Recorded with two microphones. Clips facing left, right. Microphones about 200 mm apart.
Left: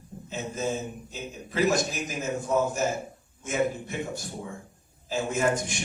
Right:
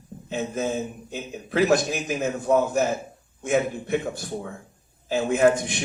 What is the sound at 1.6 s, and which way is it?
A man's voice, 55° right (ahead or behind).